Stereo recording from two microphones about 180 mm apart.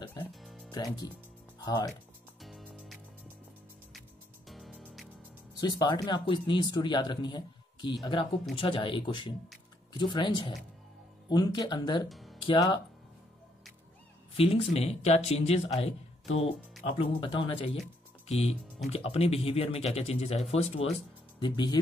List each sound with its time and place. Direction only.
0.0 s music: 20° left (ahead or behind)
0.3 s music: centre (ahead or behind)
0.7 s speech: 20° left (ahead or behind)
2.4 s music: centre (ahead or behind)
4.5 s music: 5° left (ahead or behind)
5.5 s speech: 20° left (ahead or behind)
12.1 s music: centre (ahead or behind)
12.4 s speech: 25° left (ahead or behind)
14.3 s speech: 30° left (ahead or behind)
18.9 s speech: 35° left (ahead or behind)
21.4 s speech: 25° left (ahead or behind)